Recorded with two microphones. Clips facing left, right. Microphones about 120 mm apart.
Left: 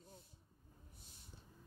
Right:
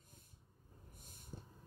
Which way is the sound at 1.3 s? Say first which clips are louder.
Right 11 dB; 45° right (ahead or behind).